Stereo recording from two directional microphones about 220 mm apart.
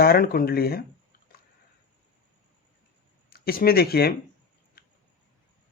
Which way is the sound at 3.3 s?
45° left (ahead or behind).